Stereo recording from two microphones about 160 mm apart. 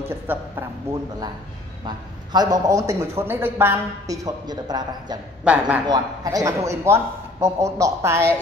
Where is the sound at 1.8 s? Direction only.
25° right (ahead or behind).